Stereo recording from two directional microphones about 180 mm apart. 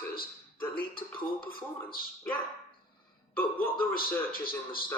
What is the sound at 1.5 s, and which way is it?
Speech, 55° left (ahead or behind).